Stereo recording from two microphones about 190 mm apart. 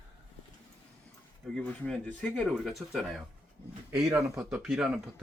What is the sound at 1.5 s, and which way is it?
Speech, 5° left (ahead or behind).